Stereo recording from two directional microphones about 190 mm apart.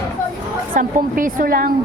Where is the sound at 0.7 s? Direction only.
45° right (ahead or behind).